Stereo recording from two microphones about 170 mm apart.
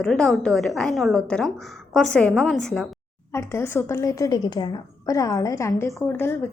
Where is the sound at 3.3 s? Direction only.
15° left (ahead or behind).